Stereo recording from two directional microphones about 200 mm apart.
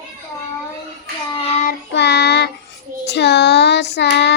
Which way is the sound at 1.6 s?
60° left (ahead or behind).